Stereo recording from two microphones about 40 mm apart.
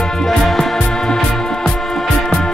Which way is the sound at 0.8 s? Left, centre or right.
Centre.